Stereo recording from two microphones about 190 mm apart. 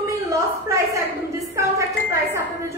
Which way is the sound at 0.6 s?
15° right (ahead or behind).